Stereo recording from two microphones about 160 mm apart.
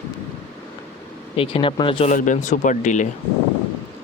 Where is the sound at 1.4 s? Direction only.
35° left (ahead or behind).